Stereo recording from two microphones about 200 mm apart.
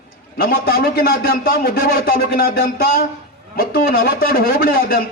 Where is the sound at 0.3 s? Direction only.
45° left (ahead or behind).